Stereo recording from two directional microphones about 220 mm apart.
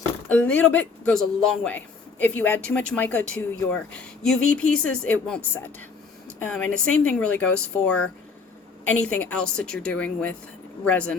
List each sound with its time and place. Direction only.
0.3 s speech: 5° left (ahead or behind)
3.2 s speech: 65° left (ahead or behind)
4.2 s speech: 5° left (ahead or behind)